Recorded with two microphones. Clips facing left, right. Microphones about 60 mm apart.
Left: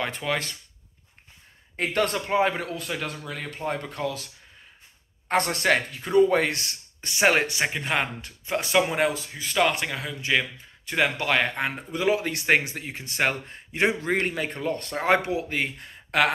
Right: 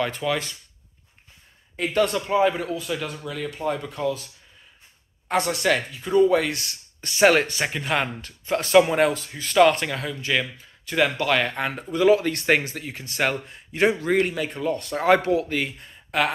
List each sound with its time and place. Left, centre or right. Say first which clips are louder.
0.1 s speech: right 3 dB; left
1.8 s a man's voice: right 1 dB; left
2.1 s a man's voice: right 3 dB; left
5.3 s speech: right 1 dB; left
7.0 s speech: right 4 dB; left
8.7 s speech: right 6 dB; centre
10.9 s speech: right 2 dB; left
15.0 s speech: right 4 dB; left
15.8 s a sound: left 1 dB; left